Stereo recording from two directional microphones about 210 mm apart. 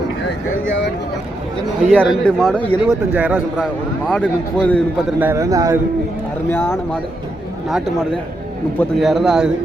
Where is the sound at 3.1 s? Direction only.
5° right (ahead or behind).